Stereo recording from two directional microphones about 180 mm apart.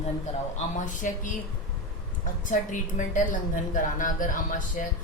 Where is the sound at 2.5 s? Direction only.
45° left (ahead or behind).